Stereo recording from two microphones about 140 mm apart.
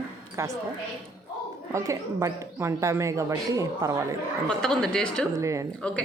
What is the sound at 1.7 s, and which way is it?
Speech, 20° right (ahead or behind).